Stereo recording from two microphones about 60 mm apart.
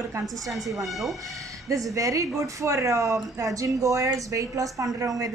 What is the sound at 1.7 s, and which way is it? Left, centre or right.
A woman's voice, right.